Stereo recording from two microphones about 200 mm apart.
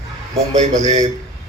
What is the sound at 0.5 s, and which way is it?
Speech, 35° right (ahead or behind).